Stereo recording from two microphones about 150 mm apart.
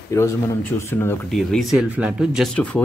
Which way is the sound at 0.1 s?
20° left (ahead or behind).